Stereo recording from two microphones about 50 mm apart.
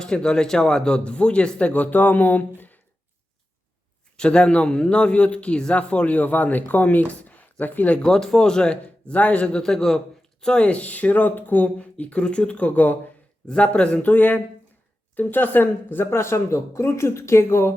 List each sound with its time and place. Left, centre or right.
0.0 s a man's voice: centre; by 2.8 s left
4.2 s a man's voice: centre
8.0 s speech: centre
10.7 s a man's voice: left